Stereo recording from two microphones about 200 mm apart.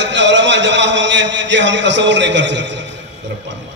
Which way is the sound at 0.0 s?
65° right (ahead or behind).